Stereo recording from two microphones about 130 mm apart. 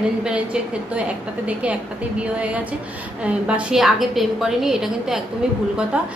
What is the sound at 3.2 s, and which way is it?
A woman's voice, 10° right (ahead or behind).